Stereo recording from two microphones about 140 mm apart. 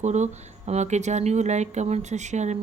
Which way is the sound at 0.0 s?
55° right (ahead or behind).